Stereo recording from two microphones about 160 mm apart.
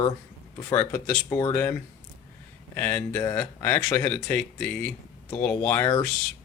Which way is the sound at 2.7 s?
15° left (ahead or behind).